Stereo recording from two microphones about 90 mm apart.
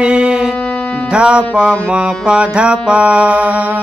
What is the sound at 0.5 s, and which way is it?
Music, 15° left (ahead or behind).